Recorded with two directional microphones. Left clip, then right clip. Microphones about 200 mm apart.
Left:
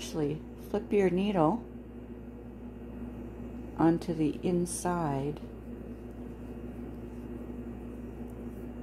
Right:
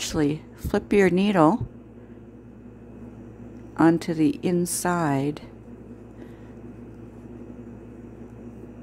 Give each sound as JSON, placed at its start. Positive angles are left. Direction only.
{"t": 0.0, "sound": "a woman's voice", "side_deg": -40}
{"t": 3.7, "sound": "a woman's voice", "side_deg": -35}